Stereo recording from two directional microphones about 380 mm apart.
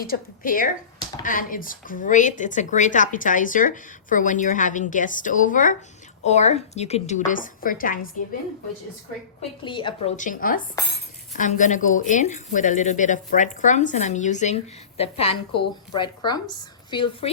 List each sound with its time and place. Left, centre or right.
0.0 s speech: left
9.4 s speech: centre